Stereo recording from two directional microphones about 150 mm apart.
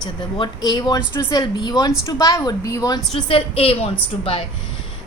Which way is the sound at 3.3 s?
40° left (ahead or behind).